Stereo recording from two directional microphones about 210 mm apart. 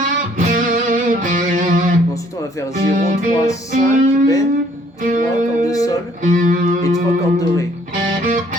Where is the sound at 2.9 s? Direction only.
40° right (ahead or behind).